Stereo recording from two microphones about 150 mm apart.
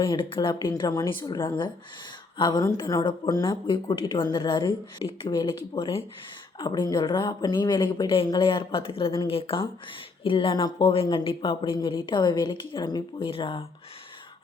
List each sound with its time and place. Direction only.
0.0 s speech: 35° left (ahead or behind)